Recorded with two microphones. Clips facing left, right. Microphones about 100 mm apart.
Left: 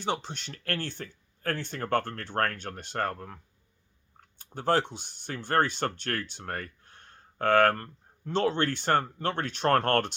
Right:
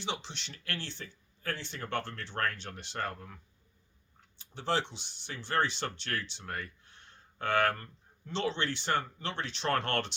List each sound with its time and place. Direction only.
0.0 s speech: 45° left (ahead or behind)